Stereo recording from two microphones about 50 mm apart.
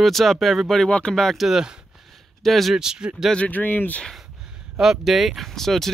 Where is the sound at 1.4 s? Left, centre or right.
Centre.